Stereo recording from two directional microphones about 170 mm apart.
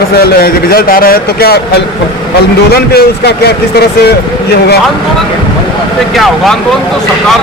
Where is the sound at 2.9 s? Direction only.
70° left (ahead or behind).